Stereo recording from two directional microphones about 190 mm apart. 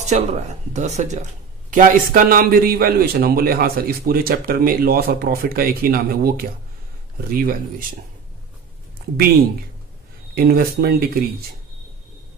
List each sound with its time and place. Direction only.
0.0 s a man's voice: 35° right (ahead or behind)
10.3 s a man's voice: 50° right (ahead or behind)